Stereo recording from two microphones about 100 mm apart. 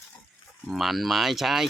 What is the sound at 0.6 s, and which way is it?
Speech, centre (ahead or behind).